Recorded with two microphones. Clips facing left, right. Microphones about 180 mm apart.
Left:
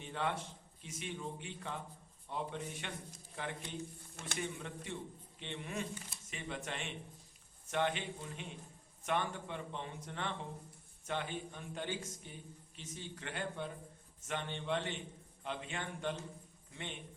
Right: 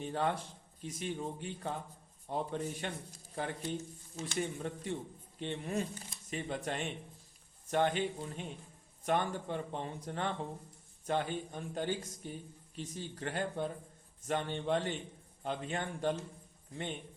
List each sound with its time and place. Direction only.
0.0 s a man's voice: 40° right (ahead or behind)